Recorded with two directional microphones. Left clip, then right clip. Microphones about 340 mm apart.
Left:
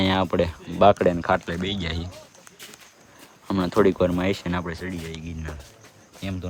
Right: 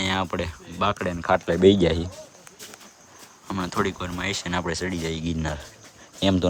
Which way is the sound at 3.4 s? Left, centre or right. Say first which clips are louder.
Left 6 dB; centre.